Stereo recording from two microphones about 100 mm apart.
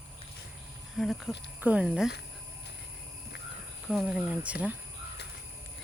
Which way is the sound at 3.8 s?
5° right (ahead or behind).